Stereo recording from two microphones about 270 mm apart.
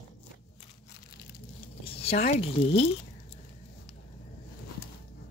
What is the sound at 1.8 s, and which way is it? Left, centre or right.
Speech, left.